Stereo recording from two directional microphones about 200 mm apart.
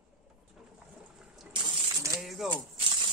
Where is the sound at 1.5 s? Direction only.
15° right (ahead or behind).